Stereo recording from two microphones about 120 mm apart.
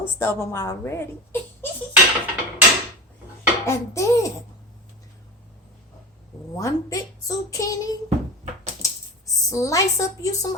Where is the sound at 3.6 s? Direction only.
25° left (ahead or behind).